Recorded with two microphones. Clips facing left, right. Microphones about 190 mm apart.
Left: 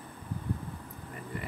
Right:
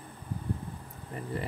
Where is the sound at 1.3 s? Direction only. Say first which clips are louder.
Right 4 dB; 30° right (ahead or behind).